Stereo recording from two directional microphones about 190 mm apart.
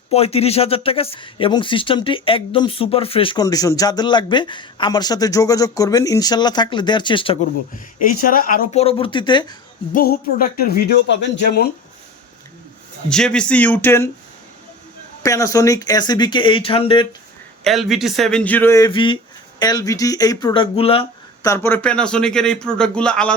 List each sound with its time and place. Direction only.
0.1 s speech: 30° left (ahead or behind)
8.2 s speech: 50° left (ahead or behind)
8.7 s speech: 30° left (ahead or behind)
9.9 s speech: 50° left (ahead or behind)
13.1 s speech: 5° left (ahead or behind)
15.2 s speech: 15° left (ahead or behind)
17.6 s speech: centre (ahead or behind)
18.9 s speech: 25° left (ahead or behind)
21.4 s speech: 15° left (ahead or behind)